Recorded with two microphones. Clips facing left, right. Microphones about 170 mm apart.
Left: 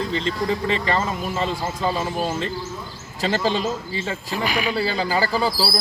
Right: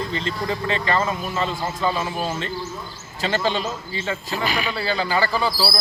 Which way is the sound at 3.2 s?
35° left (ahead or behind).